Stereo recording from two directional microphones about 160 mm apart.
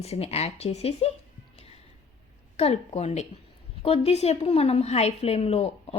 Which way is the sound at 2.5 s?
40° left (ahead or behind).